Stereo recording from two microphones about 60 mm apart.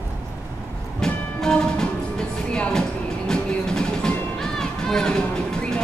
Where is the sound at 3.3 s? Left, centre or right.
Centre.